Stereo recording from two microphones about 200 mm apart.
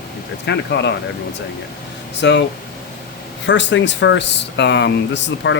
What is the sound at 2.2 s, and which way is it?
Speech, 60° left (ahead or behind).